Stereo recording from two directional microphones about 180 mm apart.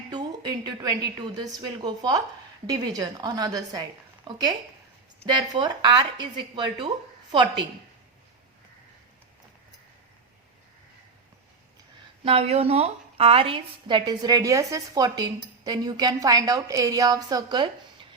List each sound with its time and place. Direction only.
0.1 s a woman's voice: 25° right (ahead or behind)
12.2 s a woman's voice: 30° right (ahead or behind)